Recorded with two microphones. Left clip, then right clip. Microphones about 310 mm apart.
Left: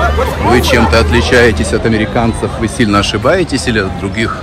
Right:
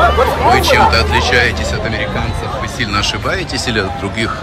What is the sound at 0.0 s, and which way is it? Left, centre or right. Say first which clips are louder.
Hubbub: right 2 dB; centre.